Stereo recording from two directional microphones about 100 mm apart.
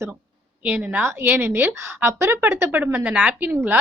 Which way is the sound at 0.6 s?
10° right (ahead or behind).